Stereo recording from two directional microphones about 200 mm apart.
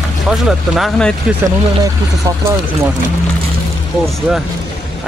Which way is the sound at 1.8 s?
15° right (ahead or behind).